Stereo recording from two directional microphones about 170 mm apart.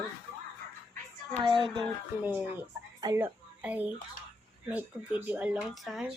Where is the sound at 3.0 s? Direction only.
20° right (ahead or behind).